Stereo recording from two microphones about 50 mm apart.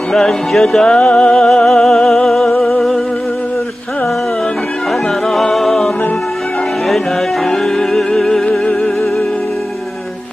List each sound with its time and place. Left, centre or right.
0.1 s music: centre
0.8 s music: centre
1.5 s music: centre
5.3 s music: centre
7.4 s music: centre